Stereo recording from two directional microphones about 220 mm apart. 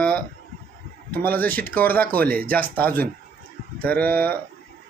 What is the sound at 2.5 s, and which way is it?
Speech, 10° left (ahead or behind).